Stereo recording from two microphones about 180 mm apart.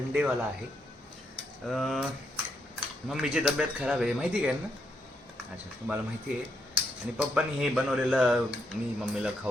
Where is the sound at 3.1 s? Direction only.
5° right (ahead or behind).